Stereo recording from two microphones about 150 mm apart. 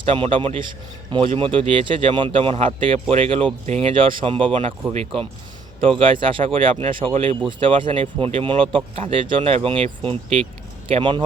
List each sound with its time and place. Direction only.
0.0 s speech: 35° right (ahead or behind)